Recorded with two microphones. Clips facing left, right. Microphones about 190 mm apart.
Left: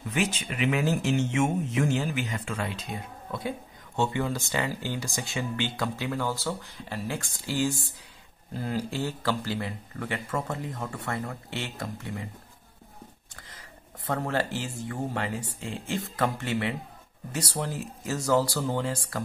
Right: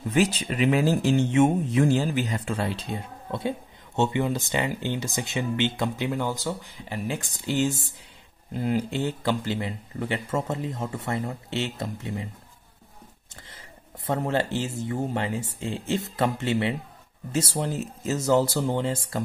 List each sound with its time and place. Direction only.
0.1 s speech: 35° right (ahead or behind)
13.4 s speech: 25° right (ahead or behind)